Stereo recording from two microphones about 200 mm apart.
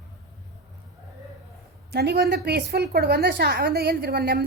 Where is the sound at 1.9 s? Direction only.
55° right (ahead or behind).